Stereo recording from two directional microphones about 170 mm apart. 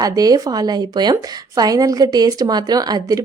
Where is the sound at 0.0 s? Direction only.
20° right (ahead or behind).